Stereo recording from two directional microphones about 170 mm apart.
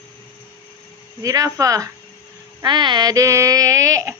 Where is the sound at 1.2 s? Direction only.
20° right (ahead or behind).